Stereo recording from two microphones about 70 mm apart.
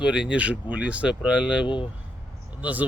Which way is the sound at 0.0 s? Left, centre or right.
Centre.